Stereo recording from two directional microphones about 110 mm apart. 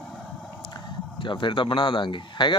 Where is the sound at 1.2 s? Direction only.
45° left (ahead or behind).